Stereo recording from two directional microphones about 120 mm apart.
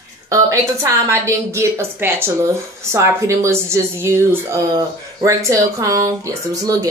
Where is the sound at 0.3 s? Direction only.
25° right (ahead or behind).